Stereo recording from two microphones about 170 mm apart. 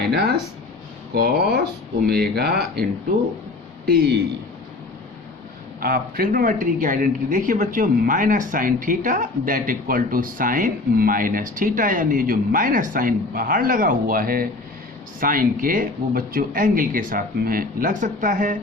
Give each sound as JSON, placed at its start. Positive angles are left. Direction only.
{"t": 0.0, "sound": "speech", "side_deg": -70}
{"t": 3.8, "sound": "a man's voice", "side_deg": -65}
{"t": 5.8, "sound": "speech", "side_deg": -60}